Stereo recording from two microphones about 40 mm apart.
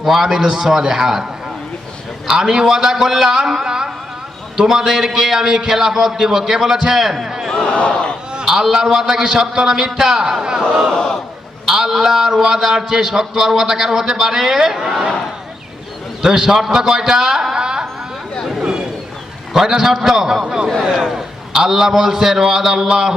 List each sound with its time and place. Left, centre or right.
0.0 s a man's voice: centre
2.3 s a man's voice: centre
7.5 s speech: centre
7.8 s speech: left
8.4 s a man's voice: centre
10.9 s speech: left
11.7 s a man's voice: centre
16.2 s a man's voice: centre
17.5 s a sound: centre
19.5 s a man's voice: centre
20.9 s a man's voice: centre